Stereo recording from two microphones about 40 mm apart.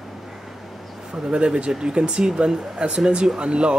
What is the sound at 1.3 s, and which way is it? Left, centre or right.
Speech, right.